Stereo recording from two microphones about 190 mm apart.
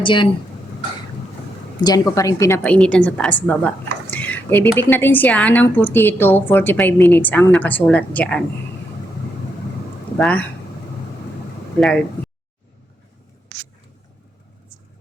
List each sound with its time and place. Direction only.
0.0 s speech: 25° left (ahead or behind)
1.8 s a woman's voice: 20° left (ahead or behind)
10.2 s speech: 5° left (ahead or behind)